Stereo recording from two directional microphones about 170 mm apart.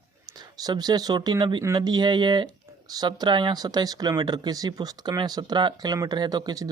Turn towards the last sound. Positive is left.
turn(degrees=-20)  # may be behind; listen again after turning